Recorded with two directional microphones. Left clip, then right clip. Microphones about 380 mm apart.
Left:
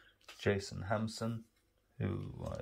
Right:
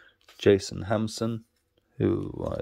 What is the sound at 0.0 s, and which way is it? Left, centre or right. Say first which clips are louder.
Speech: right 13 dB; centre.